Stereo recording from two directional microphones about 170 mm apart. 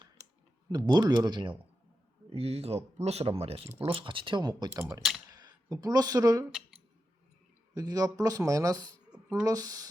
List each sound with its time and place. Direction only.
0.7 s speech: 25° right (ahead or behind)
2.3 s speech: 35° right (ahead or behind); by 6.5 s 20° right (ahead or behind)
7.8 s speech: 20° right (ahead or behind)